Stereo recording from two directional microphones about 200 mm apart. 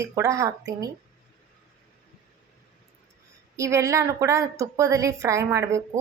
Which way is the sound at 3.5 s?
15° right (ahead or behind).